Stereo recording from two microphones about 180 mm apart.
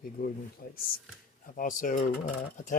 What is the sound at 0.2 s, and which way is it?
Speech, 55° left (ahead or behind).